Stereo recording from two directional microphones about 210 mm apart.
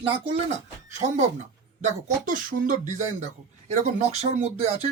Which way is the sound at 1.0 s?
35° right (ahead or behind).